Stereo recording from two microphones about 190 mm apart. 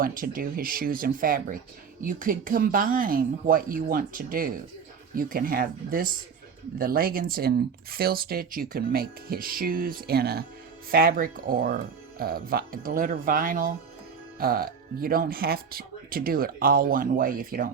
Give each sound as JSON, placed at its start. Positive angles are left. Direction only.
{"t": 0.0, "sound": "speech", "side_deg": -45}